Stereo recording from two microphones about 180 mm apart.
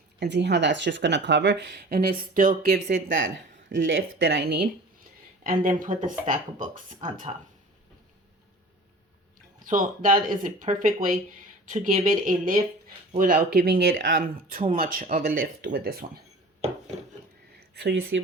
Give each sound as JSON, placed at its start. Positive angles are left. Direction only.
{"t": 0.2, "sound": "speech", "side_deg": -75}
{"t": 3.7, "sound": "speech", "side_deg": -90}
{"t": 5.4, "sound": "speech", "side_deg": -50}
{"t": 9.6, "sound": "speech", "side_deg": -45}
{"t": 17.7, "sound": "speech", "side_deg": -80}